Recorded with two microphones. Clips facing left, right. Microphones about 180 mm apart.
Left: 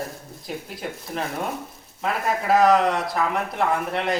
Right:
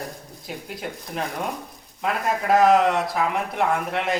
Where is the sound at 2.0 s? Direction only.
Centre (ahead or behind).